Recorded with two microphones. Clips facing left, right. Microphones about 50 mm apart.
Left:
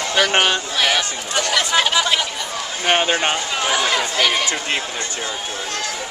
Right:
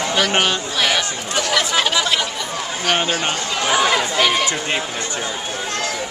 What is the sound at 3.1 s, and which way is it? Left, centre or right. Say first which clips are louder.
Speech: left 2 dB; left.